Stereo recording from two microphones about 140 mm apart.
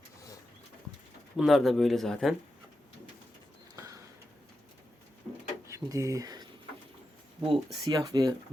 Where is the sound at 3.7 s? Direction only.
20° right (ahead or behind).